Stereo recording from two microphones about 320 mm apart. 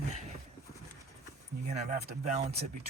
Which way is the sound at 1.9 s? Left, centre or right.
Right.